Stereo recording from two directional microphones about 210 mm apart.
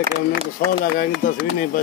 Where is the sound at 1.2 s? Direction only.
40° left (ahead or behind).